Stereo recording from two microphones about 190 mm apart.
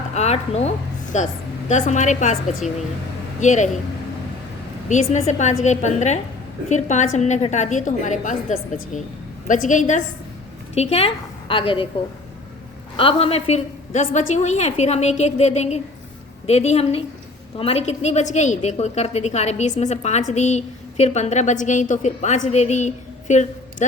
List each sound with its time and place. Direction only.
0.1 s a woman's voice: 35° left (ahead or behind)
3.4 s a woman's voice: 40° left (ahead or behind)
4.9 s a woman's voice: 35° left (ahead or behind)
13.0 s a woman's voice: 30° left (ahead or behind)